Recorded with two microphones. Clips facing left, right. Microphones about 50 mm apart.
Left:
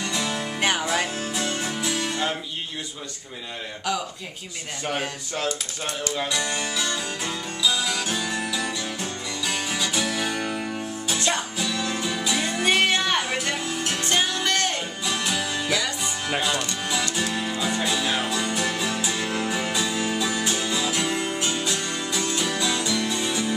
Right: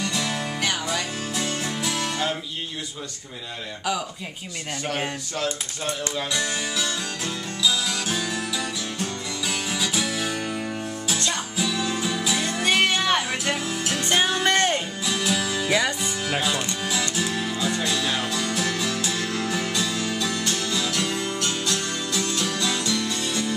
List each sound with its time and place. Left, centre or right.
0.0 s music: centre
0.6 s music: left
1.3 s music: centre
6.1 s music: centre
11.1 s music: centre
11.5 s music: centre
14.4 s music: right
15.0 s music: centre
17.1 s music: centre